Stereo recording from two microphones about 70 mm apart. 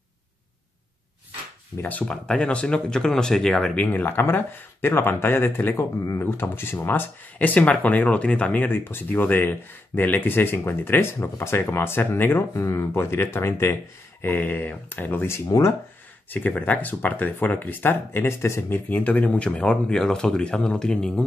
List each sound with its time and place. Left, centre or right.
1.8 s speech: left
2.0 s speech: centre
3.7 s speech: left
7.3 s speech: left
8.6 s speech: left
14.2 s speech: left
18.7 s speech: left; by 21.2 s centre